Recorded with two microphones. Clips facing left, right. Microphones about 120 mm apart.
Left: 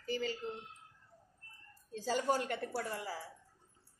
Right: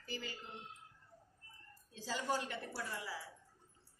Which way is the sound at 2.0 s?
50° left (ahead or behind).